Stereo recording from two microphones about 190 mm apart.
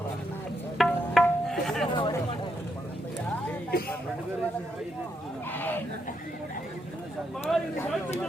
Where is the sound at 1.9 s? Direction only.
25° left (ahead or behind).